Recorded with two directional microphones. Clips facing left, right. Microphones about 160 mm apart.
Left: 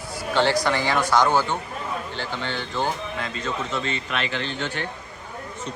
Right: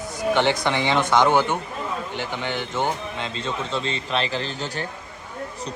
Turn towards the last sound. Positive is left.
turn(degrees=-40)  # may be behind; listen again after turning